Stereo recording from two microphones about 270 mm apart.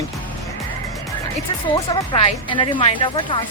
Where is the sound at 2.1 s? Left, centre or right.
Centre.